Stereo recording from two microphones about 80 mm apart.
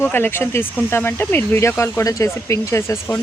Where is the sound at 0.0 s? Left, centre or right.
Left.